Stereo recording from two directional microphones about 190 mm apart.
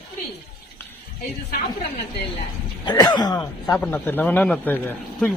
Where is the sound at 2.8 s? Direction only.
20° left (ahead or behind).